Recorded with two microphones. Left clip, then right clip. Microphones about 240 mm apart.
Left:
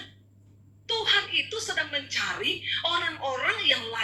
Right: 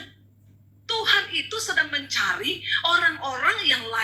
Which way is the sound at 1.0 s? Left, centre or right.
Right.